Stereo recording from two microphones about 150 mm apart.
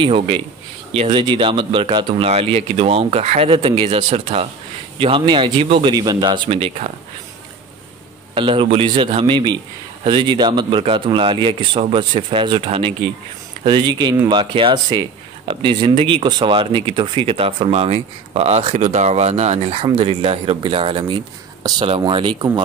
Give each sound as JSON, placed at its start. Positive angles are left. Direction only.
{"t": 0.0, "sound": "speech", "side_deg": -35}
{"t": 8.4, "sound": "speech", "side_deg": -35}